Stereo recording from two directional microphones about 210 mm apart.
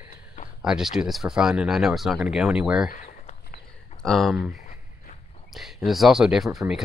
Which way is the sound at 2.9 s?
40° left (ahead or behind).